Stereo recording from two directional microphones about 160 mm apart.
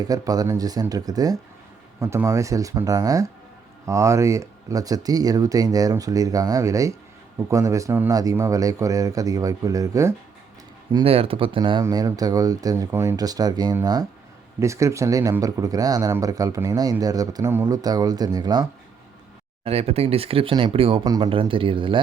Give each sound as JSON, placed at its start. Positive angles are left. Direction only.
{"t": 0.0, "sound": "speech", "side_deg": -25}
{"t": 10.9, "sound": "speech", "side_deg": -35}
{"t": 19.6, "sound": "speech", "side_deg": -40}
{"t": 21.0, "sound": "speech", "side_deg": -25}
{"t": 21.2, "sound": "speech", "side_deg": -35}